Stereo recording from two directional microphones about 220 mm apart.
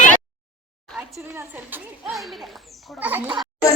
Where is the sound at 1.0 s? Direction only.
5° right (ahead or behind).